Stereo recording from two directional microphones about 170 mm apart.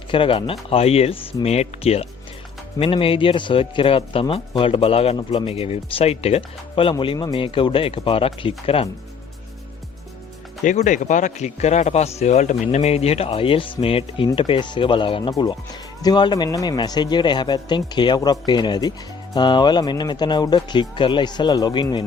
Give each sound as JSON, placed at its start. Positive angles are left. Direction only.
{"t": 0.1, "sound": "a man's voice", "side_deg": 30}
{"t": 10.6, "sound": "a man's voice", "side_deg": 45}